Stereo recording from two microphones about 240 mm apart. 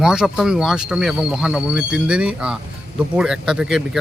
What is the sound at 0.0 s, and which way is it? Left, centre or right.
Speech, centre.